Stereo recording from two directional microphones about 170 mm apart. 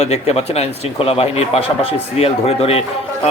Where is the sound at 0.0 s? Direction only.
40° left (ahead or behind).